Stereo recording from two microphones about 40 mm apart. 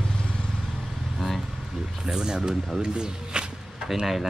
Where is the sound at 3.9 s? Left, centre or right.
Centre.